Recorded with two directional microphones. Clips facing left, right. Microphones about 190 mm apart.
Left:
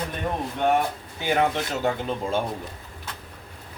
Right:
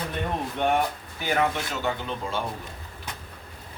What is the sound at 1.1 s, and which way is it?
Speech, 20° left (ahead or behind).